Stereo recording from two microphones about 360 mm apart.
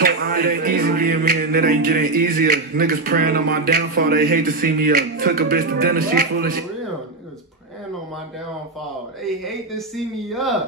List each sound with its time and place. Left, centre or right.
0.0 s music: right
6.1 s a man's voice: right
9.2 s speech: centre